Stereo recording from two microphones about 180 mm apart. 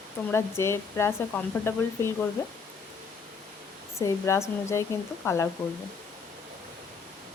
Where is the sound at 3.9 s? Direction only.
15° left (ahead or behind).